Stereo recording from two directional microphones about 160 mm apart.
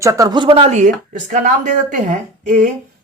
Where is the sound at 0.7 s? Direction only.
50° right (ahead or behind).